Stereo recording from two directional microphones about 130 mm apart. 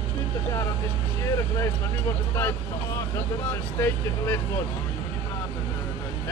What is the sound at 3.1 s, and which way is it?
Speech, 20° left (ahead or behind).